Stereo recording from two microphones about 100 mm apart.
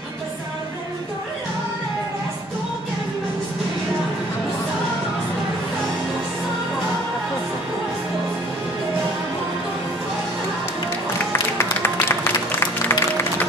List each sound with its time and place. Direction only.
11.3 s music: 25° left (ahead or behind)